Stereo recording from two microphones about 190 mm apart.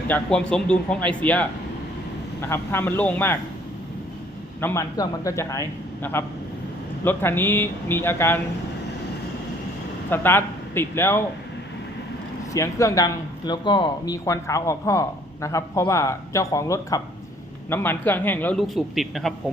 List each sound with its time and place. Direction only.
0.1 s speech: 5° left (ahead or behind)
2.5 s speech: 10° left (ahead or behind)
4.6 s speech: 15° left (ahead or behind)
10.1 s a man's voice: 10° left (ahead or behind)
12.5 s speech: 15° left (ahead or behind); by 19.3 s centre (ahead or behind)